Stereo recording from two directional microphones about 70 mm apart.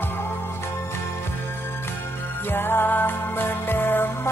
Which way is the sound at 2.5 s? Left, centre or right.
Left.